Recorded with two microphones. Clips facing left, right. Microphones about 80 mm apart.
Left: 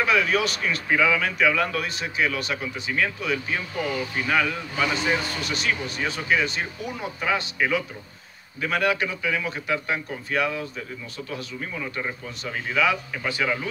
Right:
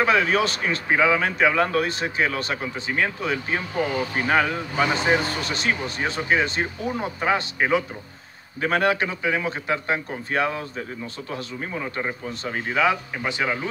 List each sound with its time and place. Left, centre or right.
0.0 s a man's voice: right